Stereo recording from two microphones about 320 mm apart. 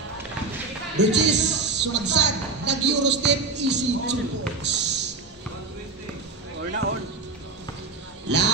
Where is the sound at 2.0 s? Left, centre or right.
Right.